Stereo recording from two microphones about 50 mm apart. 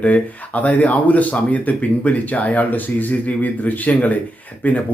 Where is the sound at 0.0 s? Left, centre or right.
Left.